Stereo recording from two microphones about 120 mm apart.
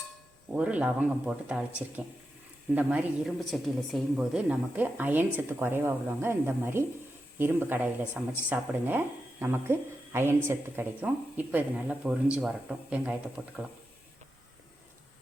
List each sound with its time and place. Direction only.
0.5 s speech: 10° right (ahead or behind)
3.2 s speech: centre (ahead or behind)